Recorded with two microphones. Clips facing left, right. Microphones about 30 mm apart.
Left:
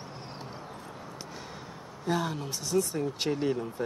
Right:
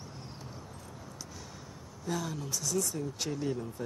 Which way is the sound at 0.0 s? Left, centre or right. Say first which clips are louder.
Left 5 dB; left.